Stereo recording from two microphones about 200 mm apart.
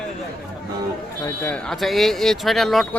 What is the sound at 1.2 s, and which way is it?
A man's voice, 10° left (ahead or behind).